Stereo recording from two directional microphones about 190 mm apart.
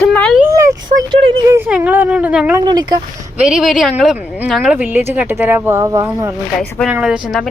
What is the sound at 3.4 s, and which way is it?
A woman's voice, 5° right (ahead or behind).